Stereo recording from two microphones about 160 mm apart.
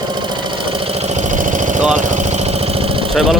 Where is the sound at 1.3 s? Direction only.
55° right (ahead or behind).